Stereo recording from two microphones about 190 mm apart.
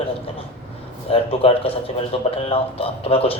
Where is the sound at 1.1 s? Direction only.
30° left (ahead or behind).